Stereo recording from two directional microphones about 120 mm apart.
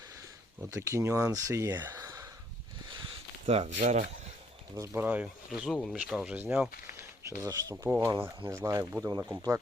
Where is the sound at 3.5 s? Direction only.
75° right (ahead or behind).